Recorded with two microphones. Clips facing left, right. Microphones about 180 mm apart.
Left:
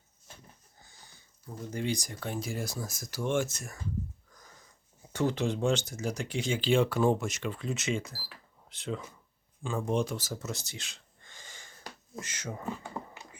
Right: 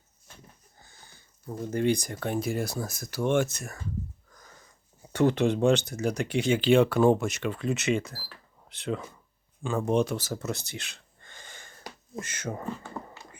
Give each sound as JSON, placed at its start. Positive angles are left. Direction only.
{"t": 1.7, "sound": "speech", "side_deg": -60}
{"t": 5.1, "sound": "speech", "side_deg": -65}